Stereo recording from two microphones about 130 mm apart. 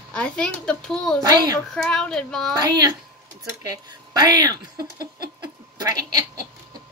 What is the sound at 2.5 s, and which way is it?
Speech, 30° right (ahead or behind).